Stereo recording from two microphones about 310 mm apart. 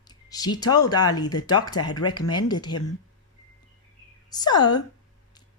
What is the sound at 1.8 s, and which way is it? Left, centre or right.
Speech, left.